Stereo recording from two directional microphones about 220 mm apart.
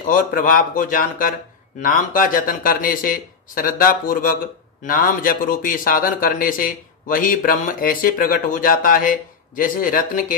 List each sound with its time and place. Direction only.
0.0 s a man's voice: 40° left (ahead or behind)